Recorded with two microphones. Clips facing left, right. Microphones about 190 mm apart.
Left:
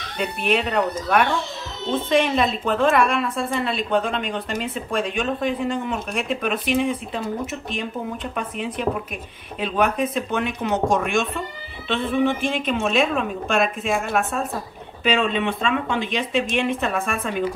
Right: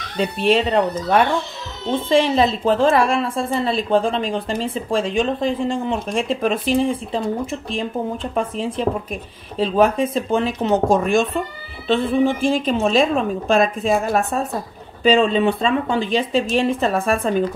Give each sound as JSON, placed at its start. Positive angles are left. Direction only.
{"t": 0.2, "sound": "a woman's voice", "side_deg": -30}